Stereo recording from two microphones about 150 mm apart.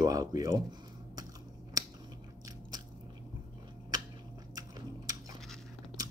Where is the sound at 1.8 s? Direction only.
25° right (ahead or behind).